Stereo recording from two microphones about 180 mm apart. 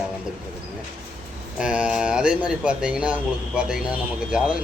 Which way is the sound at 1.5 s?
5° right (ahead or behind).